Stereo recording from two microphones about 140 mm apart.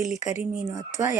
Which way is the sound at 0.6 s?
25° right (ahead or behind).